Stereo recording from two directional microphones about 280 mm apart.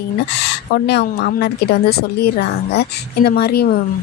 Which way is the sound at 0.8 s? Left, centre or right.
Left.